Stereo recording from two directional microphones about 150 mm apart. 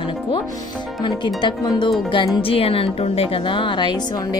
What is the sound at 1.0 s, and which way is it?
Speech, 30° left (ahead or behind).